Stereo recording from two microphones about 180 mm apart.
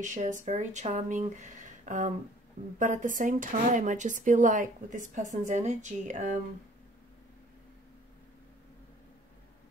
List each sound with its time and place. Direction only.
0.0 s speech: 45° right (ahead or behind)